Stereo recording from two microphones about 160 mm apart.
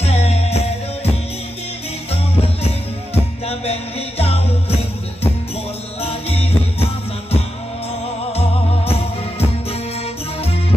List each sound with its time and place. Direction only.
0.0 s music: 40° left (ahead or behind)
4.2 s music: 40° left (ahead or behind)
5.9 s music: 40° left (ahead or behind)
8.3 s music: 40° left (ahead or behind)